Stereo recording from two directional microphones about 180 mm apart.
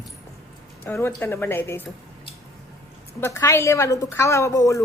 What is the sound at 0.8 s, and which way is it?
Speech, 15° left (ahead or behind).